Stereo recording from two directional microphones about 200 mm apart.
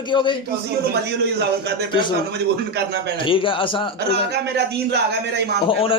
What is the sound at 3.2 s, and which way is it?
Speech, 25° left (ahead or behind).